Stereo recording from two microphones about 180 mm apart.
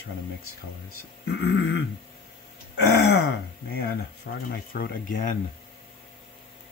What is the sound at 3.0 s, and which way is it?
Speech, 65° left (ahead or behind).